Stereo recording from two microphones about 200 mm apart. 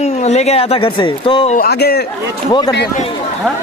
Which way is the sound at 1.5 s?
50° left (ahead or behind).